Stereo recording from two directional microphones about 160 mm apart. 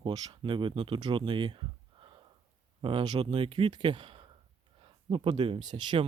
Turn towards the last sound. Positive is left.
turn(degrees=-30)  # may be behind; listen again after turning